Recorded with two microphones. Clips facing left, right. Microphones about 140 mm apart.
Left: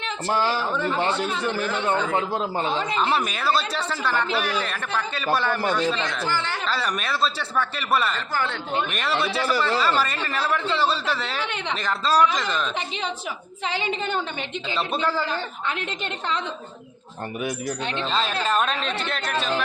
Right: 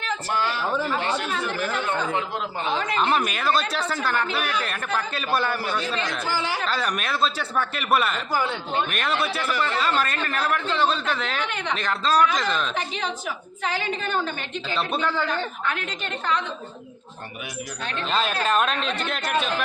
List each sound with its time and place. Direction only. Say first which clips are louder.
0.0 s a man's voice: left 2 dB; 30° left (ahead or behind)
2.9 s speech: right 1 dB; centre (ahead or behind)
6.7 s speech: even; centre (ahead or behind)
8.3 s speech: right 2 dB; 20° right (ahead or behind)
8.9 s speech: even; centre (ahead or behind)
9.5 s speech: left 4 dB; 35° left (ahead or behind)
9.8 s speech: left 1 dB; 5° left (ahead or behind)
13.7 s a woman's voice: left 1 dB; 25° left (ahead or behind)
15.0 s speech: left 1 dB; 5° left (ahead or behind)
15.3 s a woman's voice: right 1 dB; 25° left (ahead or behind)
18.1 s speech: right 2 dB; centre (ahead or behind)